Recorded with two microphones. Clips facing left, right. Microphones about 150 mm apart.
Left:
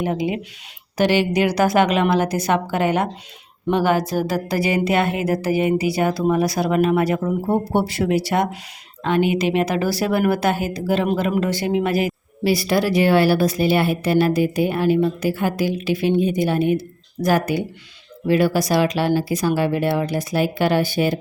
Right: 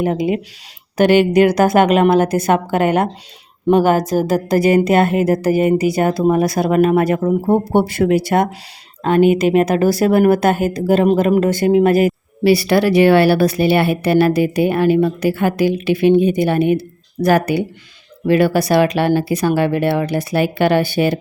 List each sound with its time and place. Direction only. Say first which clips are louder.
0.0 s a woman's voice: right 5 dB; 50° right (ahead or behind); by 21.2 s 70° right (ahead or behind)